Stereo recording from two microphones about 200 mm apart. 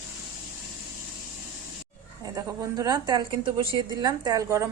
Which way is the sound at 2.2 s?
20° right (ahead or behind).